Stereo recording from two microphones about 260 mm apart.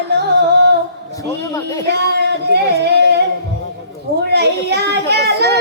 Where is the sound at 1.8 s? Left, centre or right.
Right.